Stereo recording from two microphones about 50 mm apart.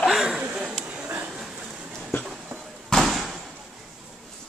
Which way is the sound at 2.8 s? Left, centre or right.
Centre.